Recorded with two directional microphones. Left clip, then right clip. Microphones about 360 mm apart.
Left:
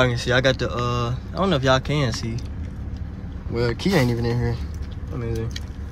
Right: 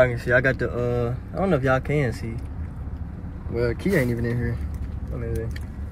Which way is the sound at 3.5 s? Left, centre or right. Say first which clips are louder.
Left 1 dB; centre.